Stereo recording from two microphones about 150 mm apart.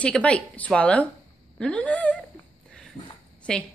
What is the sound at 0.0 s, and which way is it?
Speech, 5° left (ahead or behind).